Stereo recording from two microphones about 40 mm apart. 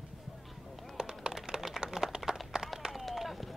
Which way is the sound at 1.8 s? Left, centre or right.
Centre.